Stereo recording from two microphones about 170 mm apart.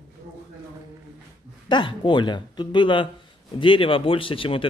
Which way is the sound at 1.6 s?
30° left (ahead or behind).